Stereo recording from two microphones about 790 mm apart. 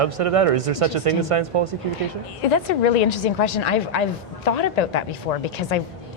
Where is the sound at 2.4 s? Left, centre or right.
Left.